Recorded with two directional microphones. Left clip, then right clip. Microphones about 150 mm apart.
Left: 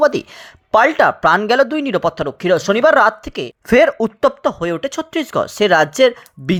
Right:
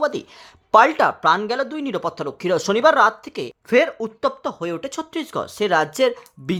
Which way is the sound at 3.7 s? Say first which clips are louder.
Left 6 dB; 40° left (ahead or behind).